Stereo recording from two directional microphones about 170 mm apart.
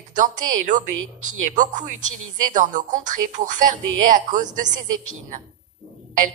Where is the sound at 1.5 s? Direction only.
45° right (ahead or behind).